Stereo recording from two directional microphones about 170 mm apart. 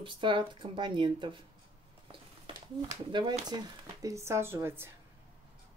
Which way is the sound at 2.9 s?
25° right (ahead or behind).